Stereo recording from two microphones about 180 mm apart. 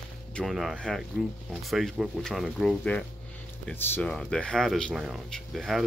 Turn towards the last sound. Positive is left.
turn(degrees=0)  # may be behind; listen again after turning